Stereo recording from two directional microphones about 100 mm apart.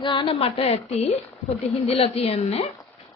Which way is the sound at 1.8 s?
75° left (ahead or behind).